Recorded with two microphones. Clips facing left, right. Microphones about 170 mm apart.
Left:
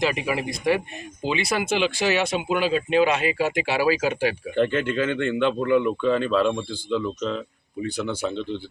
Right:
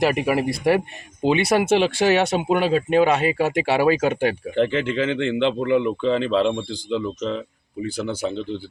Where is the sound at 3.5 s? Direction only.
30° right (ahead or behind).